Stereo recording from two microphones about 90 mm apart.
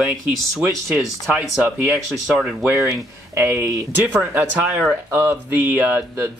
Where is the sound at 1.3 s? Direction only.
20° right (ahead or behind).